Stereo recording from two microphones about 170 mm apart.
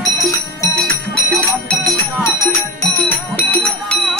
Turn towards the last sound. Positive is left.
turn(degrees=10)  # may be behind; listen again after turning